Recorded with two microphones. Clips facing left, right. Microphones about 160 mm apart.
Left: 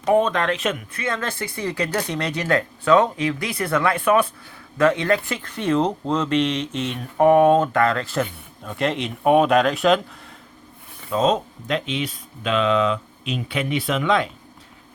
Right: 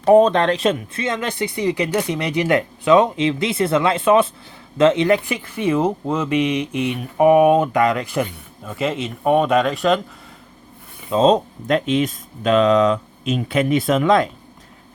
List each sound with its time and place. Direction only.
0.0 s speech: 35° right (ahead or behind); by 8.3 s 15° right (ahead or behind)
8.6 s speech: 5° right (ahead or behind)
11.1 s speech: 30° right (ahead or behind)
11.7 s speech: 45° right (ahead or behind)